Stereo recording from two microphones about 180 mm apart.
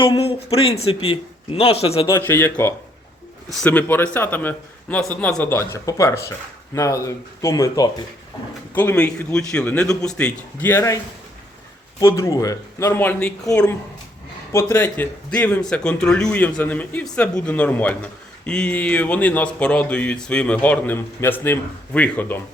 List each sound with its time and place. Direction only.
0.0 s a man's voice: 30° left (ahead or behind)
2.0 s speech: 15° left (ahead or behind)
14.5 s speech: 15° left (ahead or behind)